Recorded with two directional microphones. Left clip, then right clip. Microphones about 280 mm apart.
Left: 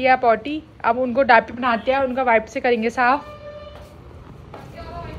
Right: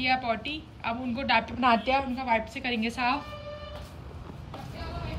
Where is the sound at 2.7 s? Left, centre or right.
Centre.